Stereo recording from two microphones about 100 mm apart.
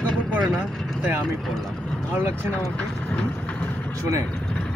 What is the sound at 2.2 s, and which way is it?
Speech, 20° right (ahead or behind).